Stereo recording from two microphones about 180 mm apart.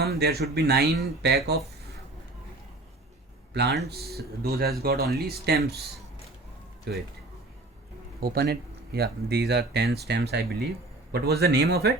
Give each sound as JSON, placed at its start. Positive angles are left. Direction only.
{"t": 0.0, "sound": "speech", "side_deg": -65}
{"t": 3.5, "sound": "speech", "side_deg": -65}
{"t": 6.9, "sound": "speech", "side_deg": -65}
{"t": 8.2, "sound": "speech", "side_deg": -60}